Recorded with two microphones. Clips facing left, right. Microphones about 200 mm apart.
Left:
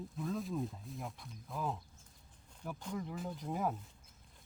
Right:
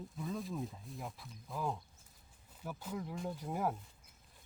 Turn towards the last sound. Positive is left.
turn(degrees=-5)  # may be behind; listen again after turning